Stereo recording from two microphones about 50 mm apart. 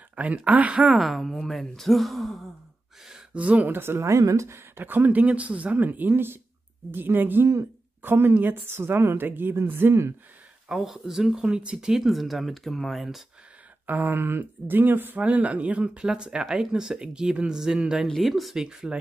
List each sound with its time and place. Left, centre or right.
0.1 s speech: right
0.8 s speech: centre
3.3 s speech: right
3.6 s speech: right
4.0 s speech: right
4.7 s a woman's voice: right
8.6 s speech: right
10.7 s speech: centre
11.4 s speech: centre
13.8 s speech: right
15.1 s speech: right
16.0 s speech: centre
18.2 s speech: centre